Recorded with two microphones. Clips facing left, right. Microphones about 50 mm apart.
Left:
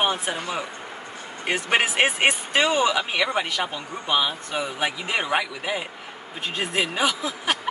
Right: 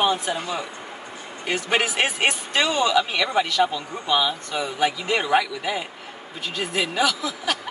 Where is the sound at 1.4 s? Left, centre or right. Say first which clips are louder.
Left 1 dB; left.